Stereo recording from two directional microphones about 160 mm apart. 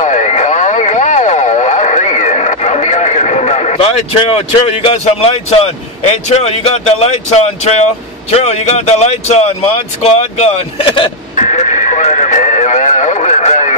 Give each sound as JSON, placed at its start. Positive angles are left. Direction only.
{"t": 0.0, "sound": "radio", "side_deg": 45}
{"t": 8.3, "sound": "speech", "side_deg": 40}
{"t": 11.3, "sound": "radio", "side_deg": 45}